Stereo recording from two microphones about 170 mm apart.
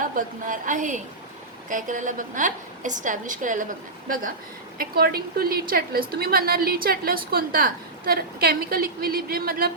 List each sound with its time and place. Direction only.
0.0 s a woman's voice: 50° right (ahead or behind)